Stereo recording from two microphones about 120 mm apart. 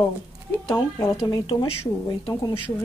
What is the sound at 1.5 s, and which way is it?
Speech, 45° left (ahead or behind).